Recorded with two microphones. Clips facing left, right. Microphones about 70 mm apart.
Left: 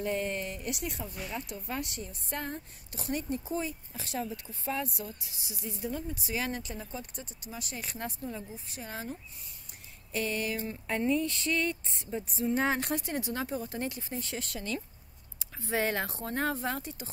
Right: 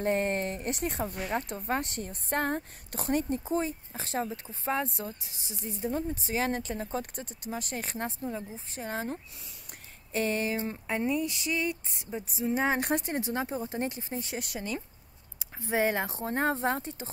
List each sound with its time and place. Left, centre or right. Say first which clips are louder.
0.0 s a woman's voice: right 4 dB; right
10.1 s a woman's voice: right 3 dB; right
10.9 s speech: left 1 dB; centre; by 17.1 s right